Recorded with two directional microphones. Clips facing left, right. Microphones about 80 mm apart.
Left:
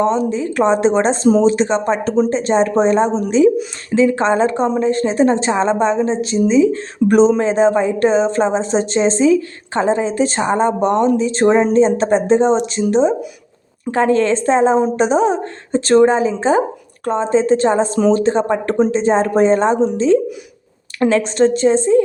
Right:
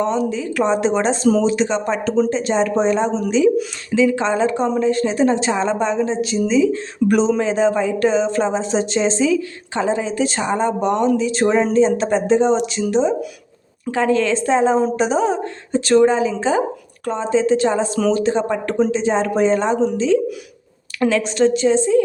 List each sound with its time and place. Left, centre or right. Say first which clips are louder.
0.0 s speech: left 3 dB; left